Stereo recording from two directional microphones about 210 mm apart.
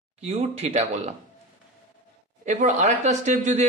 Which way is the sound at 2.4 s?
35° right (ahead or behind).